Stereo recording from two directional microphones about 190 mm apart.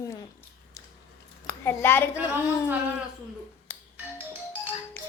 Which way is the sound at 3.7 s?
10° left (ahead or behind).